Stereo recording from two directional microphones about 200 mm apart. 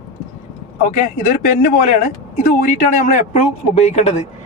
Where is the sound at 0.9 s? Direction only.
40° left (ahead or behind).